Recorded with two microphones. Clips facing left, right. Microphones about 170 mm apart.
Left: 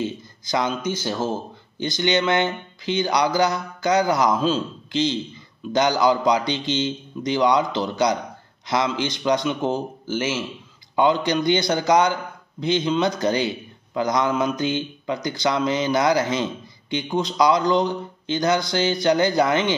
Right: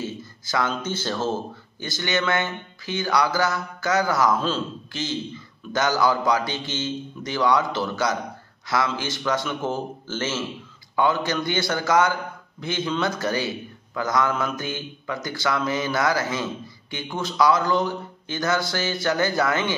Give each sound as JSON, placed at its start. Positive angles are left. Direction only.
{"t": 0.0, "sound": "a man's voice", "side_deg": 20}